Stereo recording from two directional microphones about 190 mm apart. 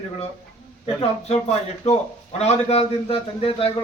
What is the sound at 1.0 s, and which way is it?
A man's voice, 35° left (ahead or behind).